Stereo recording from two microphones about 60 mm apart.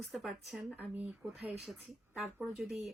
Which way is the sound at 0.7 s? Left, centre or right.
Right.